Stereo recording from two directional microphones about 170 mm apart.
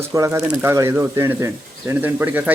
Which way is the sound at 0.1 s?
20° right (ahead or behind).